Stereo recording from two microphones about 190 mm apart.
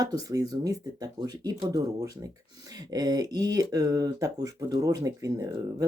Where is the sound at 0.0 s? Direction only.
20° right (ahead or behind).